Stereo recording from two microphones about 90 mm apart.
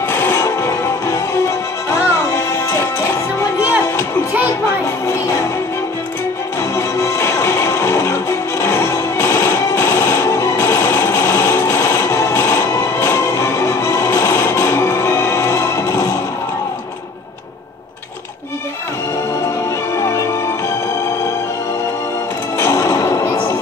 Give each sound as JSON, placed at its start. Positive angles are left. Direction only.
{"t": 0.1, "sound": "music", "side_deg": 30}
{"t": 6.6, "sound": "music", "side_deg": 30}
{"t": 20.0, "sound": "music", "side_deg": 30}
{"t": 22.6, "sound": "music", "side_deg": 35}